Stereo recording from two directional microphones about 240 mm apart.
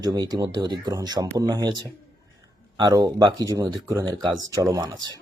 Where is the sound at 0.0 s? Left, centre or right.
Centre.